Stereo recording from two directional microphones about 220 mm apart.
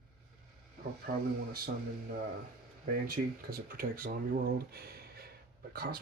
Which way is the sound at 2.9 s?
45° right (ahead or behind).